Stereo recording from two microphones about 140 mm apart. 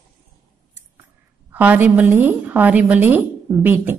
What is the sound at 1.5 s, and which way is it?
A woman's voice, 15° right (ahead or behind).